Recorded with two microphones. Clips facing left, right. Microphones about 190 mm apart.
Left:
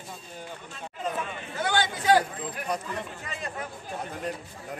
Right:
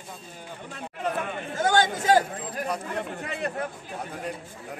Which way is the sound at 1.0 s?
60° right (ahead or behind).